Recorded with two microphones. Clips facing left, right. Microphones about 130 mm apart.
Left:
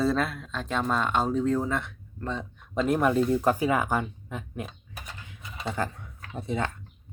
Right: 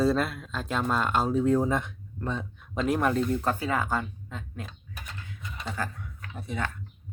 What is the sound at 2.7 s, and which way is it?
Speech, centre (ahead or behind).